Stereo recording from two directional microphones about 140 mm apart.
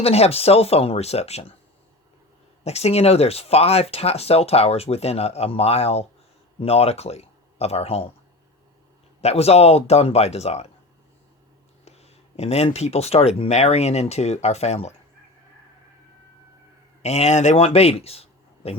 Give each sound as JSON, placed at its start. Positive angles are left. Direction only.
{"t": 0.0, "sound": "speech", "side_deg": 45}
{"t": 2.6, "sound": "speech", "side_deg": 50}
{"t": 9.2, "sound": "speech", "side_deg": 50}
{"t": 11.9, "sound": "speech", "side_deg": 50}
{"t": 17.0, "sound": "speech", "side_deg": 50}